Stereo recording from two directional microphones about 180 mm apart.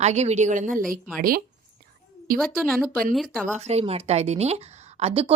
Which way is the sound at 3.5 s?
35° right (ahead or behind).